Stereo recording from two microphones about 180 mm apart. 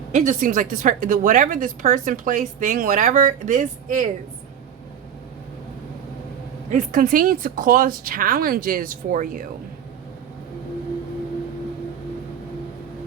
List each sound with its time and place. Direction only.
0.1 s a woman's voice: 45° right (ahead or behind)
6.7 s a woman's voice: 50° right (ahead or behind)